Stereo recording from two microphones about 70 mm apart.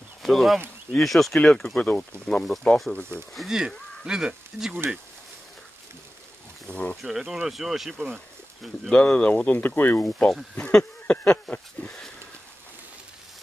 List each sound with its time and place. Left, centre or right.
0.2 s speech: centre
3.3 s speech: centre
6.7 s speech: centre
7.0 s speech: centre
8.9 s speech: centre
9.5 s speech: left
10.0 s speech: centre
10.7 s a sound: centre
11.5 s speech: left